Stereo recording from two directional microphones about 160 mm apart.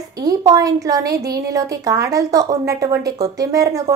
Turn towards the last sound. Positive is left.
turn(degrees=-20)  # may be behind; listen again after turning